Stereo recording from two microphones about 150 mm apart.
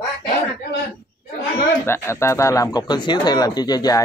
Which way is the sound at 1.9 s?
20° left (ahead or behind).